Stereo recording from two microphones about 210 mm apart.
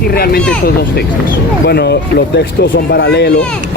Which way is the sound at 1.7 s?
50° left (ahead or behind).